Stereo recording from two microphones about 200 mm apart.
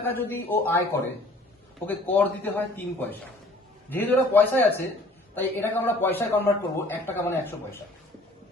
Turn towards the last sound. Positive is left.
turn(degrees=10)  # may be behind; listen again after turning